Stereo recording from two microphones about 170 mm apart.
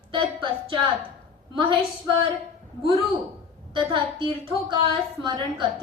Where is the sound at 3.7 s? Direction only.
30° right (ahead or behind).